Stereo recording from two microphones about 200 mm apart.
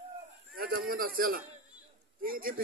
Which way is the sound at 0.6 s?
45° right (ahead or behind).